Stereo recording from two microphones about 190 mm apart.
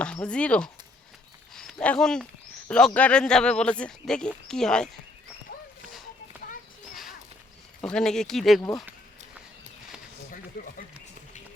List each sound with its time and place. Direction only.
0.0 s speech: 5° left (ahead or behind)
6.9 s a sound: centre (ahead or behind)
7.8 s speech: 5° left (ahead or behind)
10.5 s speech: 50° left (ahead or behind)